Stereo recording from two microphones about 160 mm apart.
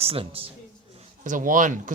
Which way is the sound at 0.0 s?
35° right (ahead or behind).